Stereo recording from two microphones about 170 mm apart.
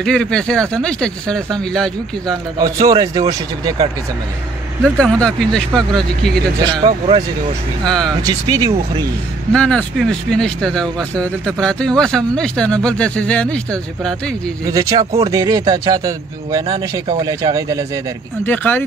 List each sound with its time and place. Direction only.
0.0 s speech: 5° left (ahead or behind)
2.6 s speech: 20° right (ahead or behind)
4.8 s speech: 5° right (ahead or behind)
6.6 s speech: 20° right (ahead or behind)
6.9 s speech: 40° right (ahead or behind)
8.2 s speech: 20° right (ahead or behind)
9.5 s speech: 5° left (ahead or behind)
14.7 s speech: 20° right (ahead or behind)
18.4 s speech: 10° left (ahead or behind)